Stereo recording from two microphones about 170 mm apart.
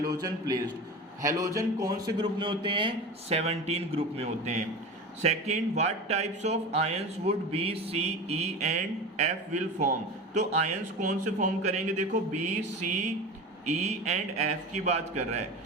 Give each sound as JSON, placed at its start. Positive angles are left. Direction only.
{"t": 0.0, "sound": "a man's voice", "side_deg": -25}